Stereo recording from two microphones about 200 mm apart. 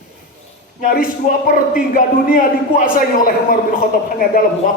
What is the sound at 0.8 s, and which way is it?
A man's voice, 45° left (ahead or behind).